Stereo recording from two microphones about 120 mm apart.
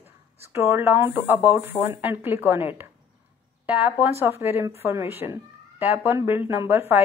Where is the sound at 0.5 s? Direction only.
20° right (ahead or behind).